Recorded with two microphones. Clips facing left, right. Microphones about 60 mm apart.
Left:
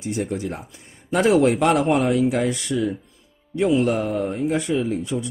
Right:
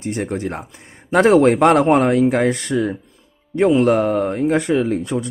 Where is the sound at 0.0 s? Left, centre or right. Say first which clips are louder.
Right 3 dB; right.